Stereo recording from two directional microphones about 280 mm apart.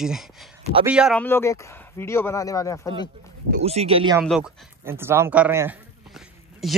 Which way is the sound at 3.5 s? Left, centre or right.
Right.